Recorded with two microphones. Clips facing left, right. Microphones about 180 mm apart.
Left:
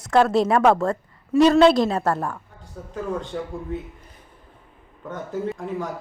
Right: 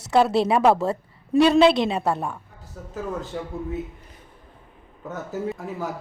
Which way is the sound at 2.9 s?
5° right (ahead or behind).